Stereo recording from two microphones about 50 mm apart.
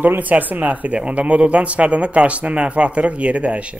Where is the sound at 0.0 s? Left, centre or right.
Right.